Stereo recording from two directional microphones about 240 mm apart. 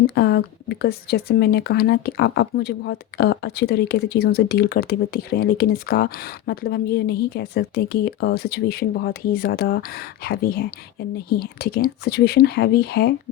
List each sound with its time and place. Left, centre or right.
0.1 s speech: left